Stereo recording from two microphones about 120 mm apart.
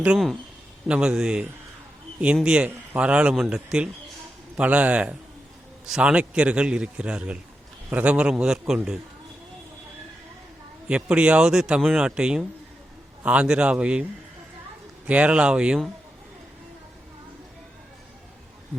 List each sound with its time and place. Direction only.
0.9 s a man's voice: 10° right (ahead or behind)
10.8 s a man's voice: 10° right (ahead or behind)
15.0 s a man's voice: 10° right (ahead or behind)